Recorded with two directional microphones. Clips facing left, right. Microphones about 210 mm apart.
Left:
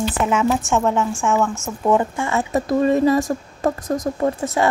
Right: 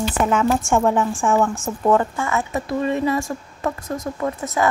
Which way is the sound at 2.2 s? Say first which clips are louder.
Left 3 dB; 35° left (ahead or behind).